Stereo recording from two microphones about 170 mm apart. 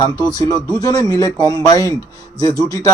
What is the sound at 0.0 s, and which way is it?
Speech, 25° left (ahead or behind).